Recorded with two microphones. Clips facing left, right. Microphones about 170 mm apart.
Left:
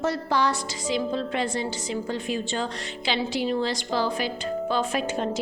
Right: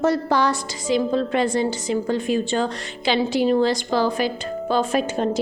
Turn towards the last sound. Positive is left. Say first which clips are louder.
# right 5 dB
turn(degrees=-40)  # may be behind; listen again after turning